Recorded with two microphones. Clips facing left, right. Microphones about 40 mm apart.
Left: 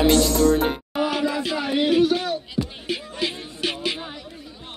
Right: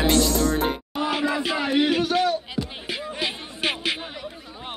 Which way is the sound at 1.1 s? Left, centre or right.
Centre.